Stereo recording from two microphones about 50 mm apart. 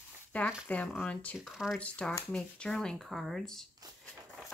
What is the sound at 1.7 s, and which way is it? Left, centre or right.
Speech, left.